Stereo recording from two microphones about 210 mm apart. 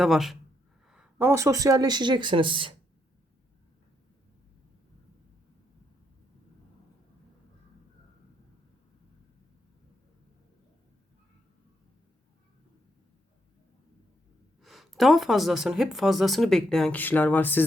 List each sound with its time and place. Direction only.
0.0 s speech: centre (ahead or behind); by 2.7 s 25° right (ahead or behind)
14.6 s speech: centre (ahead or behind)